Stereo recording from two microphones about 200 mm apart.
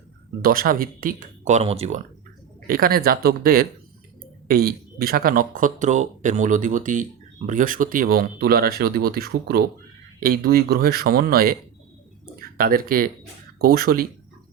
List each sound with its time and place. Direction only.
0.4 s speech: 45° right (ahead or behind); by 2.0 s 30° right (ahead or behind)
2.6 s speech: 45° right (ahead or behind)